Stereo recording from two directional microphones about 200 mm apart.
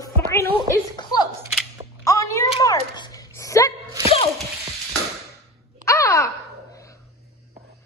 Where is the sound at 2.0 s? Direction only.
15° left (ahead or behind).